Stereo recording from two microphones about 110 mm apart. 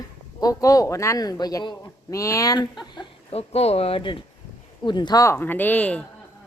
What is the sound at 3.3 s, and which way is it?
Speech, 70° left (ahead or behind).